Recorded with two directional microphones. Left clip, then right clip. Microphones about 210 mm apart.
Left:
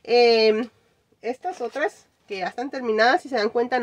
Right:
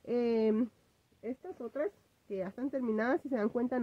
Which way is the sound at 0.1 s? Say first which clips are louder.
Left 14 dB; 25° right (ahead or behind).